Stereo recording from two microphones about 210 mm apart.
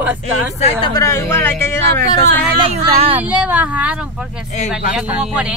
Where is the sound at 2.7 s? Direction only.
30° right (ahead or behind).